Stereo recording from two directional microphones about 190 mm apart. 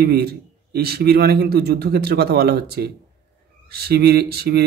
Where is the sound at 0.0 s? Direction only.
55° right (ahead or behind).